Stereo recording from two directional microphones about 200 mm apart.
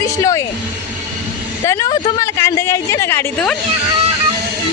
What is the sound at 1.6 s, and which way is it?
A woman's voice, 15° left (ahead or behind).